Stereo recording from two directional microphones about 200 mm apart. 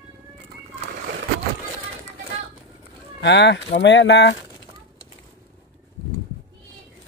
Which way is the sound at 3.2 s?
60° left (ahead or behind).